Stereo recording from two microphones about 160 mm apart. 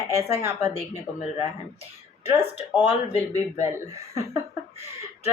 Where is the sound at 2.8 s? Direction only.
45° left (ahead or behind).